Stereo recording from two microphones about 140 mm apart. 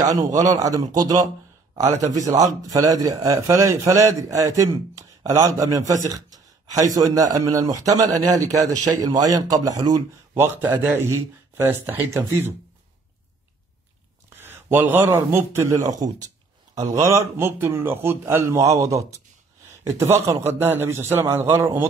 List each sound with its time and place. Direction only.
0.0 s a man's voice: 25° right (ahead or behind)
14.3 s a man's voice: 15° right (ahead or behind)